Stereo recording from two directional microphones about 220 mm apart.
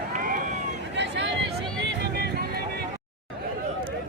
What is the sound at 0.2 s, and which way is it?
Run, 40° right (ahead or behind).